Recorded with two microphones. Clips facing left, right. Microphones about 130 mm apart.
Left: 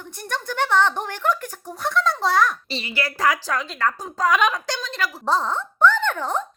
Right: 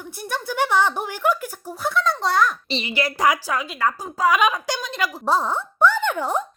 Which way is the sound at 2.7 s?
20° right (ahead or behind).